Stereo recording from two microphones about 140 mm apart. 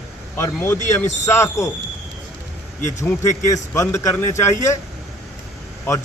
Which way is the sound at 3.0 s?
20° left (ahead or behind).